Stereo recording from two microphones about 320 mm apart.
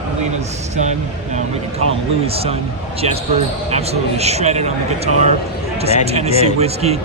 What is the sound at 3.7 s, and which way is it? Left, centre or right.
Speech, centre.